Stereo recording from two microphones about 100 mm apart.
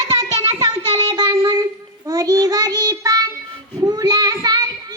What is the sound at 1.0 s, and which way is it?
Child singing, 45° right (ahead or behind).